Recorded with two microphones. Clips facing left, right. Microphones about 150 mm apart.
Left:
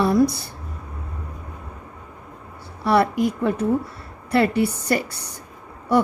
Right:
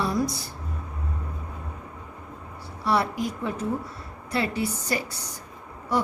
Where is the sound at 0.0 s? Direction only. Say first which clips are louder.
Left 8 dB; 60° left (ahead or behind).